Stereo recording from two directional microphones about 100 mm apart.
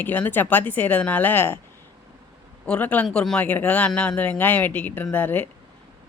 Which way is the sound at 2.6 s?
15° left (ahead or behind).